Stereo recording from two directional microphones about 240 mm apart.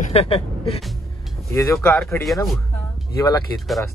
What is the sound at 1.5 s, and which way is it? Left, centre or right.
Speech, centre.